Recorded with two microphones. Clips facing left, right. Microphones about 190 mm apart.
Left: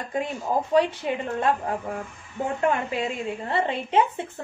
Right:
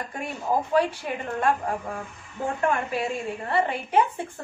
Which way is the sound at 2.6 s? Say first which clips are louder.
Left 1 dB; 20° left (ahead or behind).